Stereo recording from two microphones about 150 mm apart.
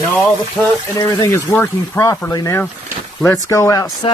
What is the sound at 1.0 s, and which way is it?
Speech, 25° left (ahead or behind).